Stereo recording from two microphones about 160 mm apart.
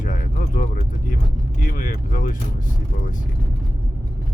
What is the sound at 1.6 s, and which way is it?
Speech, 60° left (ahead or behind).